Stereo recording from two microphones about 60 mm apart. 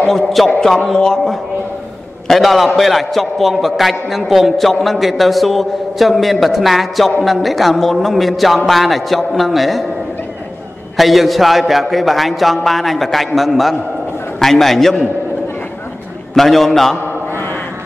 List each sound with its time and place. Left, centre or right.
0.0 s a man's voice: centre
11.0 s a man's voice: centre
16.3 s a man's voice: centre
17.3 s a sound: left